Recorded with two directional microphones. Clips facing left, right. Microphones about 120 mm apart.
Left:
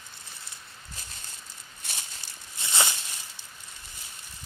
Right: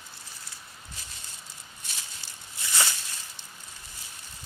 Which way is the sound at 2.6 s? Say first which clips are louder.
Left 1 dB; 20° left (ahead or behind).